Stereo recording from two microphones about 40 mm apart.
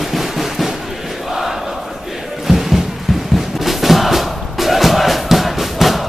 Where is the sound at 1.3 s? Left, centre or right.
Centre.